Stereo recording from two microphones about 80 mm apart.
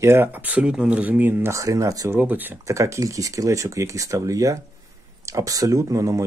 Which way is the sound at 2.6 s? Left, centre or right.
Right.